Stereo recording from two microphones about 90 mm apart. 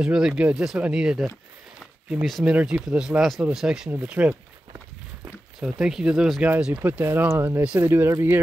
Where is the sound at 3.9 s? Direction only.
20° right (ahead or behind).